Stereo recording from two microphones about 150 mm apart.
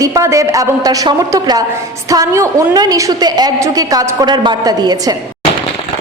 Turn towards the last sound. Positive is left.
turn(degrees=-25)  # may be behind; listen again after turning